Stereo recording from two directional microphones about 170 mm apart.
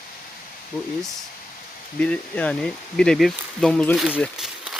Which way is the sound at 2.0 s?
5° left (ahead or behind).